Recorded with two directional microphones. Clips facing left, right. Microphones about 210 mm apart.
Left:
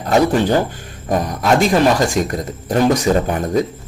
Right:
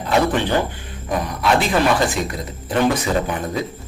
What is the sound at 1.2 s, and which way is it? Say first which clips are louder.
Speech: left 3 dB; 45° left (ahead or behind).